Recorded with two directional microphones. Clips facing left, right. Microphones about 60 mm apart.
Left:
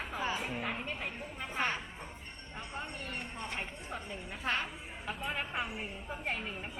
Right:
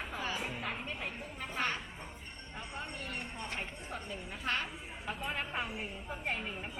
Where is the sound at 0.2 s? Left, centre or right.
Left.